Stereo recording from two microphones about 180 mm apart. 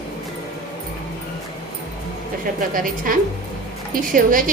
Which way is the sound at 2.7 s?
50° right (ahead or behind).